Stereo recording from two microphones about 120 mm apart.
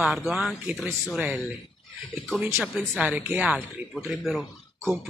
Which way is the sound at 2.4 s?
20° right (ahead or behind).